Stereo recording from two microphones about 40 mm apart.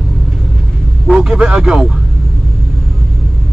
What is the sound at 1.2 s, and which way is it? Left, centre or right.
Speech, right.